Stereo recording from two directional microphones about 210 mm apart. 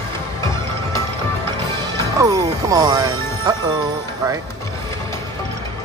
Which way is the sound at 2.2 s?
15° right (ahead or behind).